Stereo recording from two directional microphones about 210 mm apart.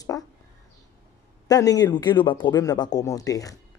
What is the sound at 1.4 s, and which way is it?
Speech, 15° left (ahead or behind).